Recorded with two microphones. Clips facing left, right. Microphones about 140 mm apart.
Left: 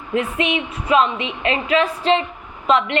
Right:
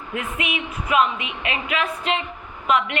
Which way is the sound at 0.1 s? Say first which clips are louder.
Left 7 dB; 30° left (ahead or behind).